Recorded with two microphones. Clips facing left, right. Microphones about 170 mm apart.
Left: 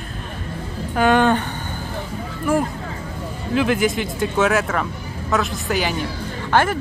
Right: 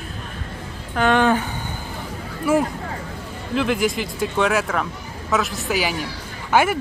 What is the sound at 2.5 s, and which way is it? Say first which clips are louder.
Speech: right 1 dB; 5° right (ahead or behind).